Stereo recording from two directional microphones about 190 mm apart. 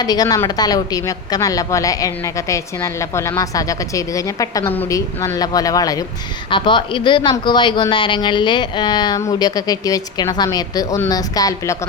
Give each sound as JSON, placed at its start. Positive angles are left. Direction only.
{"t": 0.0, "sound": "a woman's voice", "side_deg": 20}